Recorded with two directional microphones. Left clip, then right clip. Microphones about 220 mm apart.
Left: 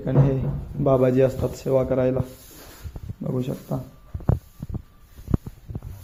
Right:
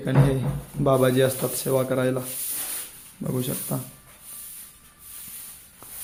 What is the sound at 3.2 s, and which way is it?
Speech, 15° right (ahead or behind).